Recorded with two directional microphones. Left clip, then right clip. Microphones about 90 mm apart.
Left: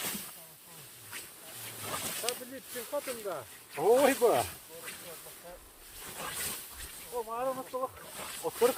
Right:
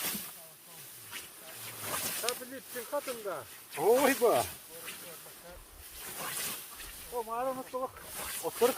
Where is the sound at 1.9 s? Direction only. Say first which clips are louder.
Right 1 dB; 45° right (ahead or behind).